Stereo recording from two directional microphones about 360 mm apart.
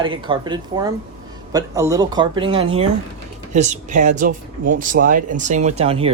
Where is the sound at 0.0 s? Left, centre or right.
Centre.